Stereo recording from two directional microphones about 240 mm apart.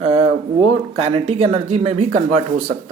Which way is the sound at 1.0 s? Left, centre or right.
Right.